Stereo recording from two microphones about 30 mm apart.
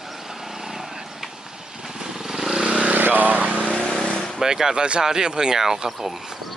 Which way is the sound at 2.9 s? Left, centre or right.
Right.